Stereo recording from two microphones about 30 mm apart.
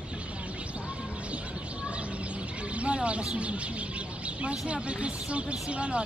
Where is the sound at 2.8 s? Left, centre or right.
Right.